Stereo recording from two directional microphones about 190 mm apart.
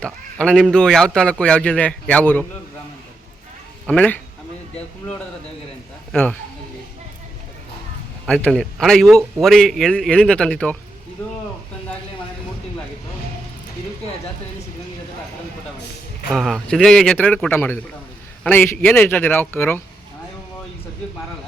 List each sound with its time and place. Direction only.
0.0 s a man's voice: 5° left (ahead or behind)
3.8 s a man's voice: 5° left (ahead or behind)
6.1 s speech: 5° left (ahead or behind)
8.3 s a man's voice: 5° left (ahead or behind)
16.3 s a man's voice: centre (ahead or behind)